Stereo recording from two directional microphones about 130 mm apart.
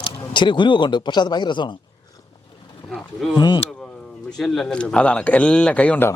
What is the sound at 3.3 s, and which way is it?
Speech, 35° left (ahead or behind).